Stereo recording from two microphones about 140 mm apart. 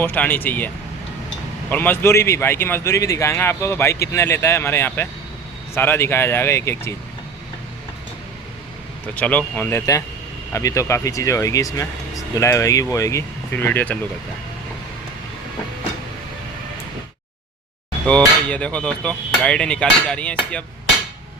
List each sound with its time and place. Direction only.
0.0 s speech: 15° left (ahead or behind)
1.7 s speech: 15° left (ahead or behind)
9.1 s speech: 10° left (ahead or behind)
18.4 s speech: 10° left (ahead or behind)